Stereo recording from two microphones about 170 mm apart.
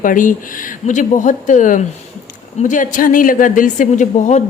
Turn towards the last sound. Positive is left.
turn(degrees=45)  # may be behind; listen again after turning